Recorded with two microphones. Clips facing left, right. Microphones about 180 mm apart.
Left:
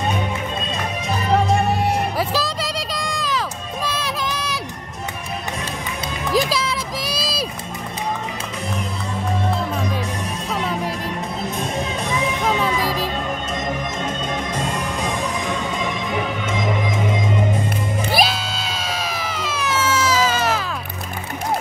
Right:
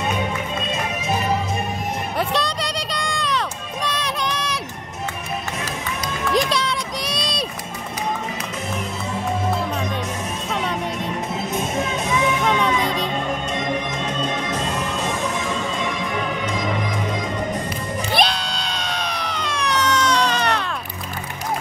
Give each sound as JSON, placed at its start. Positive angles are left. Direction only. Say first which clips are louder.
{"t": 1.5, "sound": "music", "louder": "left 7 dB", "side_deg": 75}
{"t": 2.1, "sound": "music", "louder": "even", "side_deg": 0}
{"t": 6.3, "sound": "a sound", "louder": "left 1 dB", "side_deg": 0}
{"t": 10.5, "sound": "music", "louder": "left 1 dB", "side_deg": 5}
{"t": 12.4, "sound": "music", "louder": "even", "side_deg": 5}
{"t": 18.1, "sound": "a sound", "louder": "even", "side_deg": 5}